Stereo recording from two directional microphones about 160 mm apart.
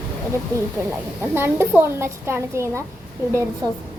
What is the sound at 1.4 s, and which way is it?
A woman's voice, 15° right (ahead or behind).